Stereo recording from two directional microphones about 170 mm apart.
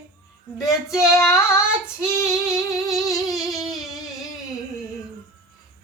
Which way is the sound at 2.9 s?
Centre (ahead or behind).